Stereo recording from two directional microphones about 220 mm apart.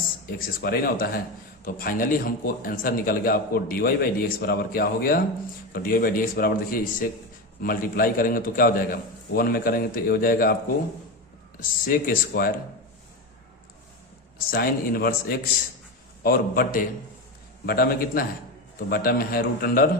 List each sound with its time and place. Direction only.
0.3 s a man's voice: 40° left (ahead or behind)
11.9 s a man's voice: 40° left (ahead or behind)
14.3 s a man's voice: 45° left (ahead or behind)